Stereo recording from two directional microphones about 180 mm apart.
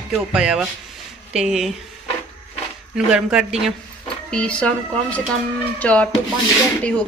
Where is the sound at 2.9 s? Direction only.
5° right (ahead or behind).